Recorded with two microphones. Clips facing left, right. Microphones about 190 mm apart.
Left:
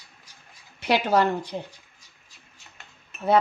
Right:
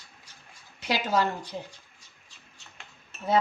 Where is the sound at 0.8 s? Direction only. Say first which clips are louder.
Left 5 dB; 60° left (ahead or behind).